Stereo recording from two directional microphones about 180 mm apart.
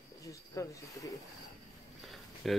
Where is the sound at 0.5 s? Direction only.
15° left (ahead or behind).